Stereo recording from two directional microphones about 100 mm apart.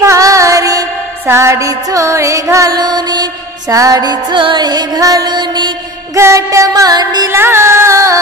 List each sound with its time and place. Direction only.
0.0 s music: 30° right (ahead or behind)
2.8 s music: 45° right (ahead or behind)
6.1 s music: 30° right (ahead or behind)
7.3 s music: 25° right (ahead or behind)